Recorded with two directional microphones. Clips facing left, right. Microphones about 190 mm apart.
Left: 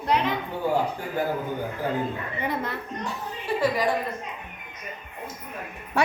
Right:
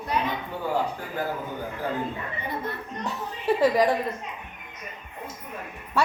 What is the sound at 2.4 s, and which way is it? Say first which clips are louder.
Speech: left 4 dB; 90° left.